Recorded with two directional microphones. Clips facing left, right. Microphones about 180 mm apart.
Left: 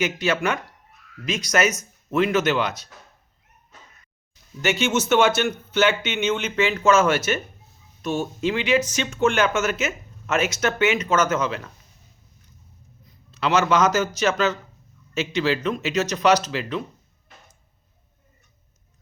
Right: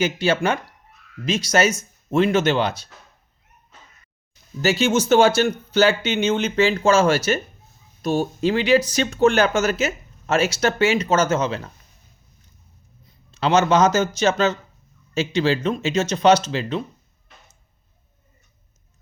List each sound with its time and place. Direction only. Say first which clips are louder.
0.0 s speech: right 3 dB; 30° right (ahead or behind)
4.6 s speech: right 3 dB; 35° right (ahead or behind)
13.3 s speech: right 3 dB; 30° right (ahead or behind)